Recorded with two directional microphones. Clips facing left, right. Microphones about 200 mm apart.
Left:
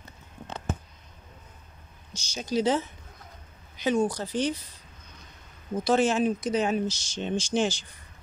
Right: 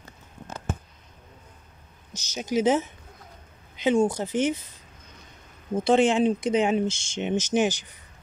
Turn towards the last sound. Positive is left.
turn(degrees=-15)  # may be behind; listen again after turning